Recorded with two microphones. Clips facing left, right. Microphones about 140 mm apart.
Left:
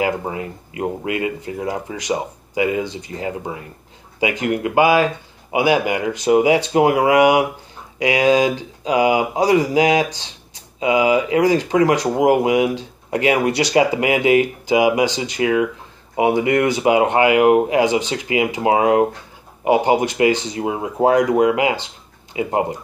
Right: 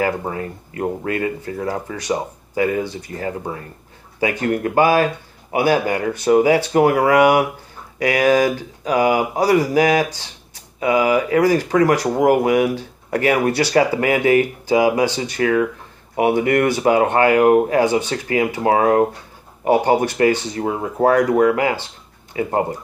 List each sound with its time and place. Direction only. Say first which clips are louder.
0.3 s speech: right 1 dB; 15° left (ahead or behind)